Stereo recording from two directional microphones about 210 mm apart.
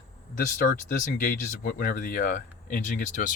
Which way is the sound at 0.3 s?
40° left (ahead or behind).